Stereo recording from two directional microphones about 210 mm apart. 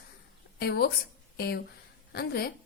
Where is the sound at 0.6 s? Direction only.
50° left (ahead or behind).